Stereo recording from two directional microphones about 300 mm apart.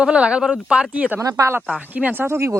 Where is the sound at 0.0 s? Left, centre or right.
Centre.